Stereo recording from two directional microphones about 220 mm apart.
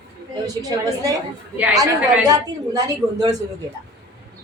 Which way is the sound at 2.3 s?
15° right (ahead or behind).